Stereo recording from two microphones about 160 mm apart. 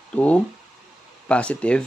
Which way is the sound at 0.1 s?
10° left (ahead or behind).